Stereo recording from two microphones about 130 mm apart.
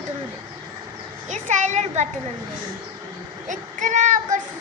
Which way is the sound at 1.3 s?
65° right (ahead or behind).